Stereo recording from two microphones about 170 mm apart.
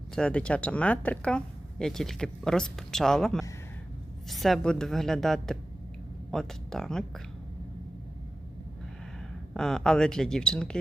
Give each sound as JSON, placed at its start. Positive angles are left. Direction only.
{"t": 0.2, "sound": "speech", "side_deg": 5}
{"t": 9.6, "sound": "speech", "side_deg": 5}